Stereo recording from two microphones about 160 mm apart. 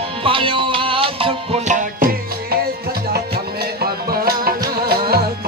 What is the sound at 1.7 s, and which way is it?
Music, 55° right (ahead or behind).